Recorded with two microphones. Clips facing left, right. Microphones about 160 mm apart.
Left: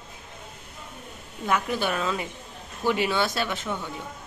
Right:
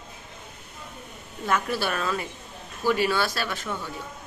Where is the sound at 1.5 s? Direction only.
15° left (ahead or behind).